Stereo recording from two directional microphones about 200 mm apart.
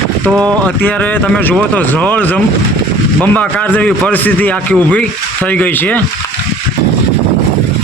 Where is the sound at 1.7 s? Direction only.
5° left (ahead or behind).